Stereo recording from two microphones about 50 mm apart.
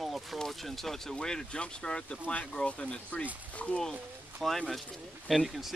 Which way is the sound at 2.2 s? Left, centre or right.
Left.